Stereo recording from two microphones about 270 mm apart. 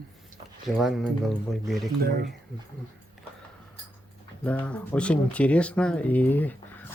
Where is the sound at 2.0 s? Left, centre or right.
Right.